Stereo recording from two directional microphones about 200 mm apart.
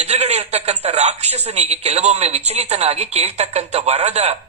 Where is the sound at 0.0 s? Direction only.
30° right (ahead or behind).